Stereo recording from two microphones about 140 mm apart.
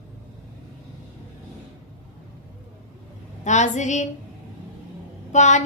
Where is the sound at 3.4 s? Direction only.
60° left (ahead or behind).